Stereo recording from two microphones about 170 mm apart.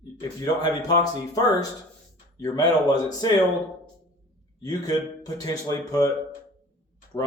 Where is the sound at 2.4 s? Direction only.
25° left (ahead or behind).